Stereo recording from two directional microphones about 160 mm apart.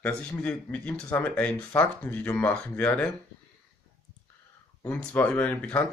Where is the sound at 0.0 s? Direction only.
10° left (ahead or behind).